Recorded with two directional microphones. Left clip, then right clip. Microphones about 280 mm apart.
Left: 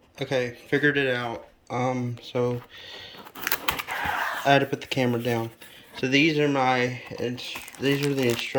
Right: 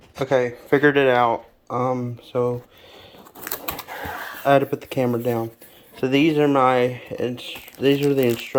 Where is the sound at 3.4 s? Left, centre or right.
Centre.